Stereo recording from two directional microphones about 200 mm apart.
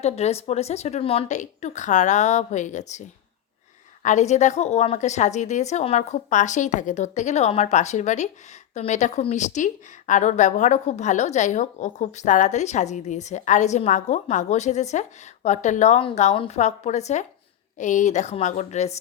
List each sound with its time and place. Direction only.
0.0 s a woman's voice: 30° left (ahead or behind)